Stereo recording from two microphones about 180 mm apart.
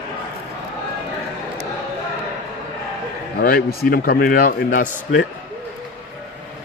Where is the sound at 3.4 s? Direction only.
55° left (ahead or behind).